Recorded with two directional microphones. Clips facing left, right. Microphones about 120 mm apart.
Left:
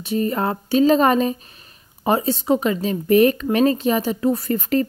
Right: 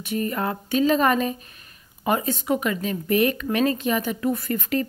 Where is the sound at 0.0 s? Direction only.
25° left (ahead or behind).